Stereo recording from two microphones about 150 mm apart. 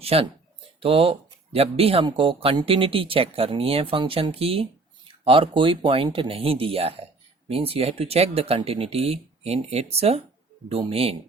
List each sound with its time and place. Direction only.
0.0 s speech: 40° right (ahead or behind)